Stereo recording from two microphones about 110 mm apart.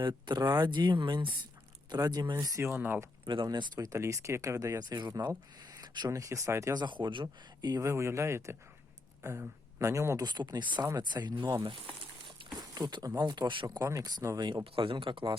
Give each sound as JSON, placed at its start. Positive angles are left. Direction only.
{"t": 0.0, "sound": "speech", "side_deg": -45}
{"t": 2.4, "sound": "speech", "side_deg": -25}
{"t": 3.2, "sound": "speech", "side_deg": -45}
{"t": 6.1, "sound": "speech", "side_deg": -30}
{"t": 6.7, "sound": "speech", "side_deg": -45}
{"t": 7.8, "sound": "speech", "side_deg": -25}
{"t": 10.2, "sound": "speech", "side_deg": -40}
{"t": 12.5, "sound": "speech", "side_deg": -40}
{"t": 13.7, "sound": "speech", "side_deg": -30}
{"t": 14.4, "sound": "speech", "side_deg": -50}